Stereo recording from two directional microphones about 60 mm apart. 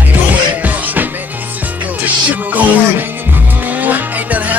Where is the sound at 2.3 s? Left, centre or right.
Right.